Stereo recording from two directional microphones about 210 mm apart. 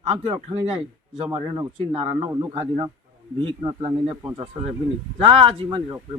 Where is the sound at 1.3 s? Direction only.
25° right (ahead or behind).